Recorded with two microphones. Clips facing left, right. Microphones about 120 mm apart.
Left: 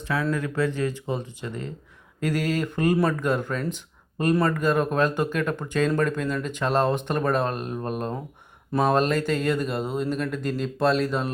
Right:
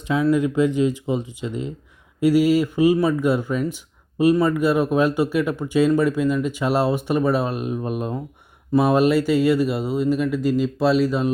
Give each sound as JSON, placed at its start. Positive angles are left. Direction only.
{"t": 0.0, "sound": "speech", "side_deg": -20}